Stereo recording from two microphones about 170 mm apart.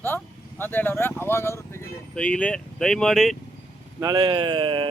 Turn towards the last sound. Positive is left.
turn(degrees=-30)  # may be behind; listen again after turning